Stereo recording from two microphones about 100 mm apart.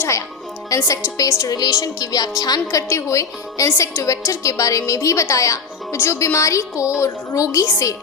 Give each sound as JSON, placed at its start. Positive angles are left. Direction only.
{"t": 0.0, "sound": "a woman's voice", "side_deg": 30}
{"t": 2.6, "sound": "a woman's voice", "side_deg": 30}